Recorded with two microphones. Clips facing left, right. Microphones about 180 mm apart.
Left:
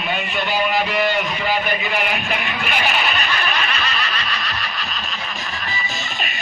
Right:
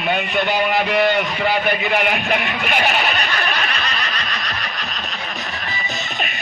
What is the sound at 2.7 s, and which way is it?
Speech, 40° right (ahead or behind).